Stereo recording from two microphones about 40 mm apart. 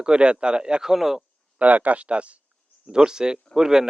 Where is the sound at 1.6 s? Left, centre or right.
Right.